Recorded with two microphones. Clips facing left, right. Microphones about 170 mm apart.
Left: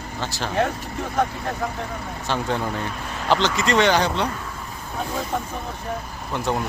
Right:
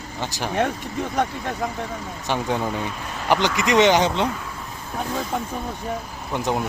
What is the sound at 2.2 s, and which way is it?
Speech, 15° right (ahead or behind).